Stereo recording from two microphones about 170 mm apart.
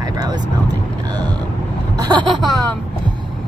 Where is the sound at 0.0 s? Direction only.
20° right (ahead or behind).